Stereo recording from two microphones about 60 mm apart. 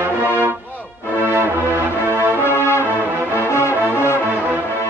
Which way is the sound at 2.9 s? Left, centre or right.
Right.